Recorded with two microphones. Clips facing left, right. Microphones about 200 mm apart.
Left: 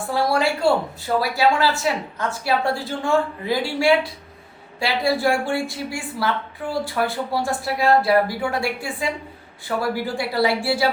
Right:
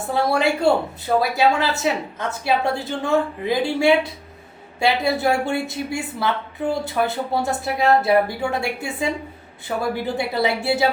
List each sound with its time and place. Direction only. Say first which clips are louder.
0.0 s speech: right 1 dB; 20° right (ahead or behind)